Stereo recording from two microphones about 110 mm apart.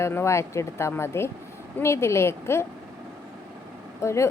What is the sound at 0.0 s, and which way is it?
A woman's voice, 25° left (ahead or behind).